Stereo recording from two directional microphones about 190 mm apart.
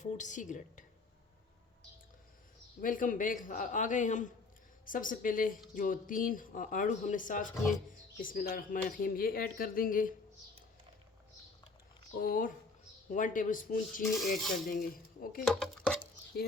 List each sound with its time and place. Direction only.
0.2 s a woman's voice: 40° left (ahead or behind)
2.8 s speech: 45° left (ahead or behind)
12.2 s speech: 50° left (ahead or behind)
15.4 s a sound: centre (ahead or behind)